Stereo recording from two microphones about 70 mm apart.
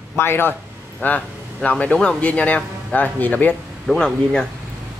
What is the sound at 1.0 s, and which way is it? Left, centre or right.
A man's voice, left.